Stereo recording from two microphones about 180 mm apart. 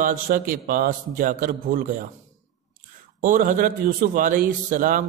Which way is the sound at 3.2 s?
50° right (ahead or behind).